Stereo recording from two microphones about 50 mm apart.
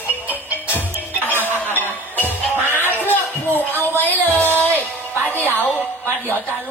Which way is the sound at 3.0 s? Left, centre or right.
Left.